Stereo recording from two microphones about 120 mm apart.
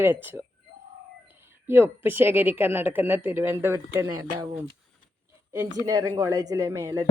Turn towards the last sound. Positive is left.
turn(degrees=-25)  # may be behind; listen again after turning